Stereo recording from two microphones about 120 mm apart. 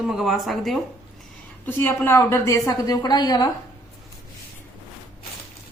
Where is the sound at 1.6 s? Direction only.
15° left (ahead or behind); by 3.4 s 35° left (ahead or behind).